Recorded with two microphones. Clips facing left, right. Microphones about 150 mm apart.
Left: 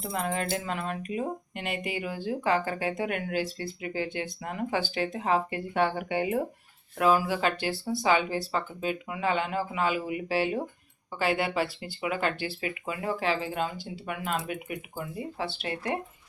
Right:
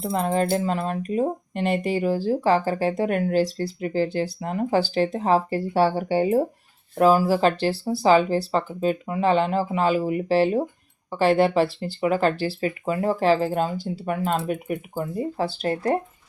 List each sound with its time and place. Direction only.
0.0 s speech: 30° right (ahead or behind)